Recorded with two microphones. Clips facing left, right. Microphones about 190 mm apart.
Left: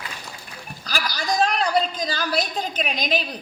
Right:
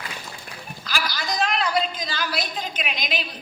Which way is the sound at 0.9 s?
45° left (ahead or behind).